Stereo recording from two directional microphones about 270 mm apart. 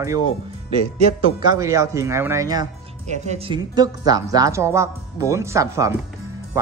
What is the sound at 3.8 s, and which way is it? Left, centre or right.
Speech, centre.